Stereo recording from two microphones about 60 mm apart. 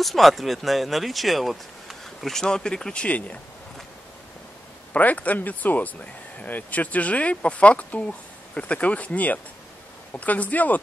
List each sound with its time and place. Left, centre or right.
0.0 s speech: centre
2.4 s speech: centre
4.9 s speech: left